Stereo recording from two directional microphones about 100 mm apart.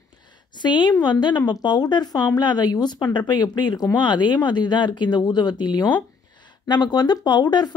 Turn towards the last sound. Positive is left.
turn(degrees=45)  # may be behind; listen again after turning